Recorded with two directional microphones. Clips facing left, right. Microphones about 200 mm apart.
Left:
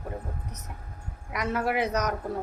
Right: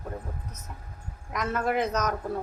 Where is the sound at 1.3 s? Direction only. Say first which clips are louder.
Even; 10° left (ahead or behind).